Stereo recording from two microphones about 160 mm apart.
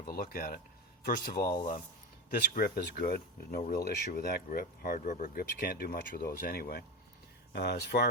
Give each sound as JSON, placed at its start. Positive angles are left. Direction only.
{"t": 0.1, "sound": "speech", "side_deg": 70}
{"t": 5.4, "sound": "speech", "side_deg": 70}